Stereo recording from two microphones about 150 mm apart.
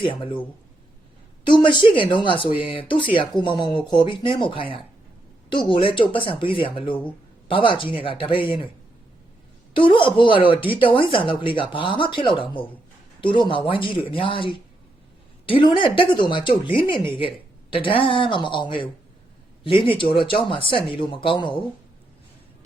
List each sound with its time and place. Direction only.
0.0 s speech: 35° left (ahead or behind)
1.5 s speech: 30° left (ahead or behind)
9.7 s speech: 35° left (ahead or behind)